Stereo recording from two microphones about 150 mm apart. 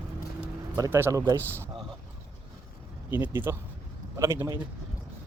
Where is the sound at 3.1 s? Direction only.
15° right (ahead or behind).